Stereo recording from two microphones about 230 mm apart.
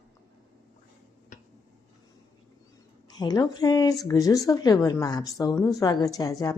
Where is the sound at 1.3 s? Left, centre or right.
Left.